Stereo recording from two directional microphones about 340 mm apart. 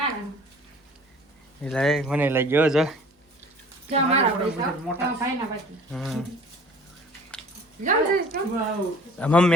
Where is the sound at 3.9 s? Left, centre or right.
Centre.